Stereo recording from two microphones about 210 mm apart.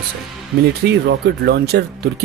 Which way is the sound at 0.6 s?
50° right (ahead or behind).